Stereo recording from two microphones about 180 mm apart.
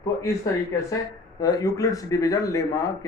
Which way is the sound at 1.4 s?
20° left (ahead or behind).